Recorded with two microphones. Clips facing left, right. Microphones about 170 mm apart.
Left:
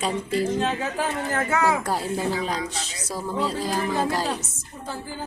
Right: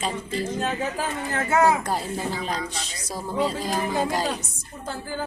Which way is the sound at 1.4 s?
30° right (ahead or behind).